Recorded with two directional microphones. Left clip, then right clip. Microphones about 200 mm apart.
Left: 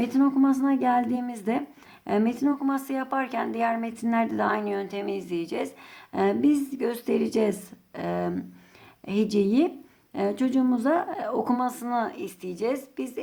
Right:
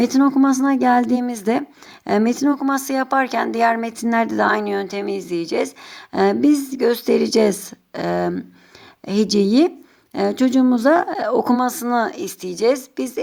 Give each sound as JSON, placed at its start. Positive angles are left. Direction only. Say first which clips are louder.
{"t": 0.0, "sound": "speech", "louder": "right 7 dB", "side_deg": -40}